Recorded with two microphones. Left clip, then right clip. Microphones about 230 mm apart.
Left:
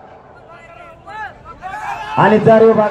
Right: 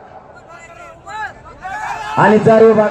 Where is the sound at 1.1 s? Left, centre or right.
Right.